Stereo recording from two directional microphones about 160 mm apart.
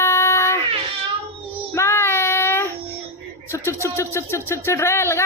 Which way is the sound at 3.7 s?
15° left (ahead or behind).